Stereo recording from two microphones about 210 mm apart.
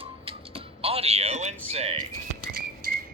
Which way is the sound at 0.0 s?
25° right (ahead or behind).